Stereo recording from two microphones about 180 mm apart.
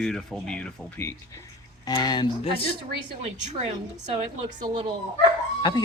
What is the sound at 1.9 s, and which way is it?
Speech, 25° left (ahead or behind).